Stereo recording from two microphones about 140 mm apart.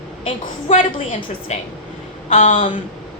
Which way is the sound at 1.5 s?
55° left (ahead or behind).